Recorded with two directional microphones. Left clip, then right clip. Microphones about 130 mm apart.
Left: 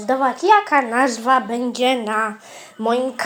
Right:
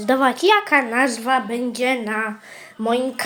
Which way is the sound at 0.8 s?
10° left (ahead or behind).